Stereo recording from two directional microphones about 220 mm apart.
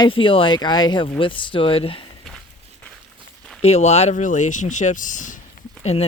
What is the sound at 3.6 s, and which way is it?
Speech, 30° left (ahead or behind).